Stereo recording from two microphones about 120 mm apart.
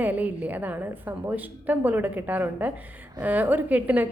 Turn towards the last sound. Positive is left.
turn(degrees=-15)  # may be behind; listen again after turning